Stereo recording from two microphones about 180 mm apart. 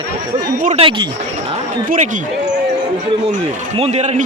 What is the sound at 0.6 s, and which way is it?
Speech, 35° right (ahead or behind).